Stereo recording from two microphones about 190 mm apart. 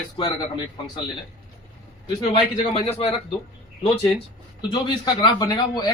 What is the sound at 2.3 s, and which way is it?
Speech, 30° left (ahead or behind).